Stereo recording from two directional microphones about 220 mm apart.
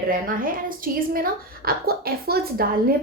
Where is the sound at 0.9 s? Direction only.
40° right (ahead or behind).